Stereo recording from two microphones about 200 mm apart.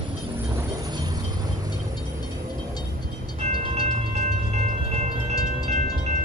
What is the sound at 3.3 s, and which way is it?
Music, 35° right (ahead or behind).